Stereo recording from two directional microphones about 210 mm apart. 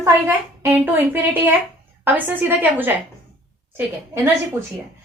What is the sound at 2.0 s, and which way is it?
Speech, 10° right (ahead or behind).